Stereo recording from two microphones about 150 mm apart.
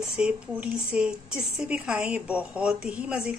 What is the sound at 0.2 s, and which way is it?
A woman's voice, 5° right (ahead or behind).